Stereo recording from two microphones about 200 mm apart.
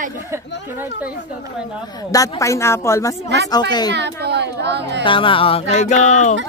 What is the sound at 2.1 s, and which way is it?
A woman's voice, 15° left (ahead or behind).